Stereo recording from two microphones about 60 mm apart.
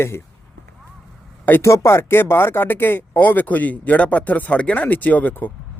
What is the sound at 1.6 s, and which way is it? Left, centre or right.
A man's voice, left.